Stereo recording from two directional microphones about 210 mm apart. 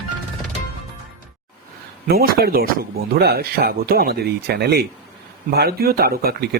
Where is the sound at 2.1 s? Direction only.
45° right (ahead or behind).